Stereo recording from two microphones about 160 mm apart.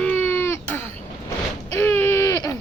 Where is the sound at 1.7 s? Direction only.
15° left (ahead or behind).